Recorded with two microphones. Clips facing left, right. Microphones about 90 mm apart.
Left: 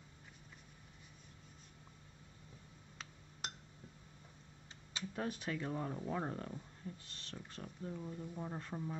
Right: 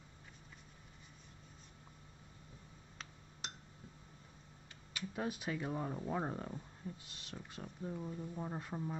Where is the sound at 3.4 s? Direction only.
45° left (ahead or behind).